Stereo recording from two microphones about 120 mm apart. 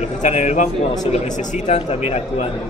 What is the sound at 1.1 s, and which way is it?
A man's voice, 80° left.